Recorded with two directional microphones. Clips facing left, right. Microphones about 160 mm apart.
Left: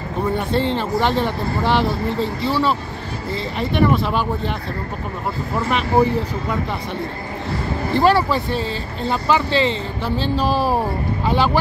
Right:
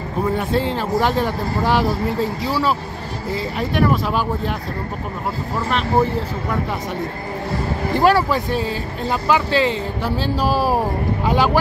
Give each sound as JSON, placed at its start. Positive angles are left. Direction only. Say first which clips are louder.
{"t": 0.4, "sound": "speech", "louder": "even", "side_deg": -5}
{"t": 7.9, "sound": "speech", "louder": "even", "side_deg": -10}